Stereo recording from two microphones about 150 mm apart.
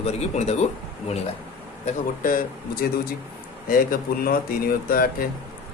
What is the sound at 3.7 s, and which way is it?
Speech, 75° left (ahead or behind).